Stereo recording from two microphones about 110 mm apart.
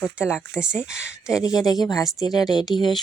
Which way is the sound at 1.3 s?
35° left (ahead or behind).